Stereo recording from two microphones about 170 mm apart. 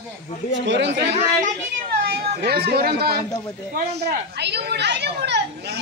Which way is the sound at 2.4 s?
70° right (ahead or behind).